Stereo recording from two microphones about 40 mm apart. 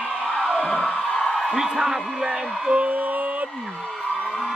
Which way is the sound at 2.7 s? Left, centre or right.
Right.